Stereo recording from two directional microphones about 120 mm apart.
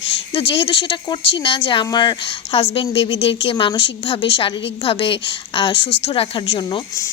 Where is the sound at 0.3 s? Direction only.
50° left (ahead or behind).